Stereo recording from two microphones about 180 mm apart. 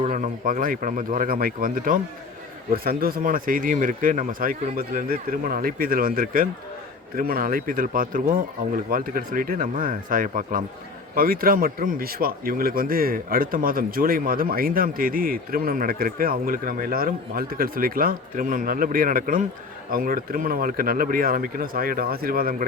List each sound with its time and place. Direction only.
0.1 s speech: 45° right (ahead or behind)